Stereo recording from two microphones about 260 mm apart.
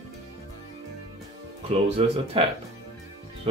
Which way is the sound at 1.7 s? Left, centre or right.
Right.